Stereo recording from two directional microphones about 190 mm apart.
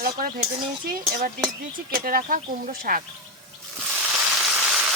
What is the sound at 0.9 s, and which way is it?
Speech, 55° right (ahead or behind).